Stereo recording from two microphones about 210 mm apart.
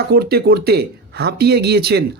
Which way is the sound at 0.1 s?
50° right (ahead or behind).